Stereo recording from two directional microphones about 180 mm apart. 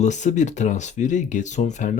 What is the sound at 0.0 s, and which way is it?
Speech, 40° left (ahead or behind).